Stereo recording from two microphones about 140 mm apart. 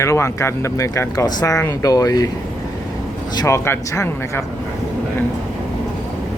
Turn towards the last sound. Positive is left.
turn(degrees=20)  # may be behind; listen again after turning